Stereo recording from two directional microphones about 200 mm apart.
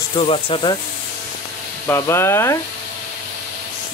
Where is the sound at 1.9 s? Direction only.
15° left (ahead or behind).